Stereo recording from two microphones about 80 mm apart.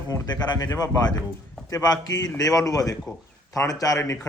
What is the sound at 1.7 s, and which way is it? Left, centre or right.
A man's voice, left.